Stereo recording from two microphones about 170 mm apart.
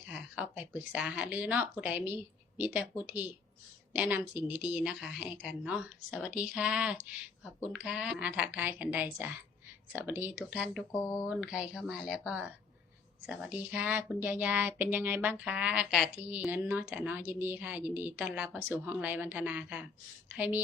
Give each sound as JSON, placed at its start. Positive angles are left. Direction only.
{"t": 0.1, "sound": "a woman's voice", "side_deg": -10}
{"t": 10.9, "sound": "speech", "side_deg": 15}
{"t": 11.3, "sound": "speech", "side_deg": -5}